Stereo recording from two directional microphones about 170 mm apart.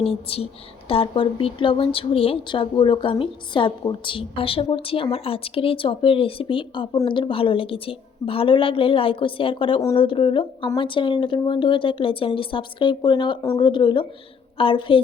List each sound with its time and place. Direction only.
0.0 s a woman's voice: 35° left (ahead or behind)